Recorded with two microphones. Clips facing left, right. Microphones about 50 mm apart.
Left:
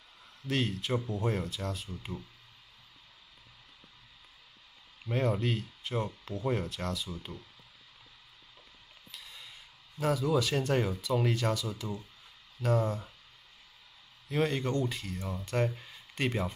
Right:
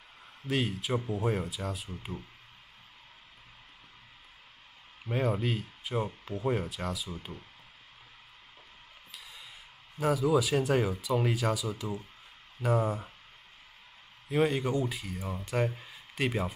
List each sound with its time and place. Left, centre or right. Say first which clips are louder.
0.5 s speech: right 1 dB; centre
5.1 s speech: even; centre
9.1 s a sound: even; centre
9.9 s speech: right 2 dB; centre
14.3 s speech: right 2 dB; centre